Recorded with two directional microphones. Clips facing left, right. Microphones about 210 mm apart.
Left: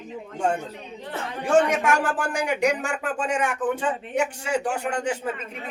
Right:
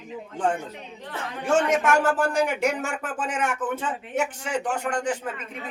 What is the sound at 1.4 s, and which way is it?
Speech, 15° left (ahead or behind).